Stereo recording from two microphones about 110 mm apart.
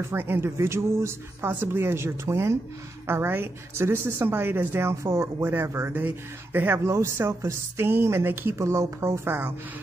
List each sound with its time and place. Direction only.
0.0 s a woman's voice: 20° right (ahead or behind)